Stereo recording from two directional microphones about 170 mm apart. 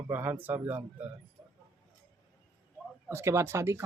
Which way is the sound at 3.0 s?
15° right (ahead or behind).